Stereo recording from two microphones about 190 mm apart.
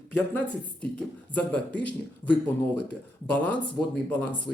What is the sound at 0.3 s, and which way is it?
A man's voice, 5° left (ahead or behind).